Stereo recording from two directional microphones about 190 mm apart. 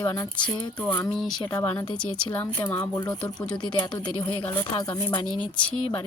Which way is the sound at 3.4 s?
5° left (ahead or behind).